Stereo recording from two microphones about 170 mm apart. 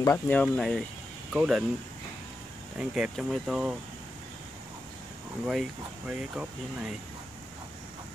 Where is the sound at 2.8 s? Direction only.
5° right (ahead or behind).